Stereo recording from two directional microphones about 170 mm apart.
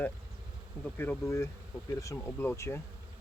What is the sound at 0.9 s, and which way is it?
Speech, 10° left (ahead or behind).